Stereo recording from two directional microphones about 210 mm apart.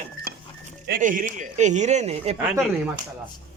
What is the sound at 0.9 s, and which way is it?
Speech, 40° right (ahead or behind).